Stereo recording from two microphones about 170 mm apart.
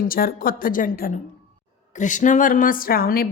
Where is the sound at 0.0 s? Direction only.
60° left (ahead or behind).